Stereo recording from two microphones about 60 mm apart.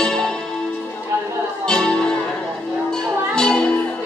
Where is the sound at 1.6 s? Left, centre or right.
Centre.